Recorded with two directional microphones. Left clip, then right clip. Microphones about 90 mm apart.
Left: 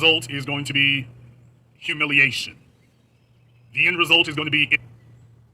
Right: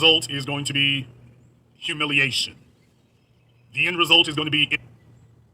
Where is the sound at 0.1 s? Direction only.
75° right (ahead or behind).